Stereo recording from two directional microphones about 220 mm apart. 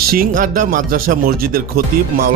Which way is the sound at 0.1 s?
40° right (ahead or behind).